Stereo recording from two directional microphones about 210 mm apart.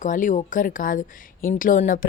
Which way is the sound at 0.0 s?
40° left (ahead or behind).